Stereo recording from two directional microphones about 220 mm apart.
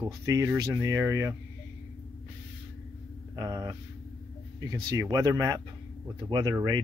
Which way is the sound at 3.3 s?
15° right (ahead or behind).